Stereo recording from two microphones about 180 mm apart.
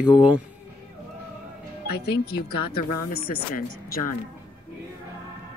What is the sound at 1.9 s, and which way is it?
Speech, 65° left (ahead or behind).